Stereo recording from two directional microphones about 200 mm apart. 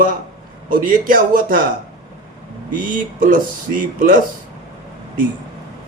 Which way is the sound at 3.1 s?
45° right (ahead or behind).